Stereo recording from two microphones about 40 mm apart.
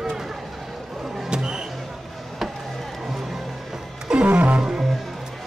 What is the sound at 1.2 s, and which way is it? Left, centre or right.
Music, centre.